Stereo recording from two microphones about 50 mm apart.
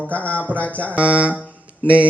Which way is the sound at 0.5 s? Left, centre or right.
Left.